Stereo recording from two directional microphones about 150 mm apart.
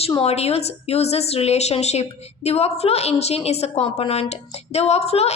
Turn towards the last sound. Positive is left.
turn(degrees=45)  # may be behind; listen again after turning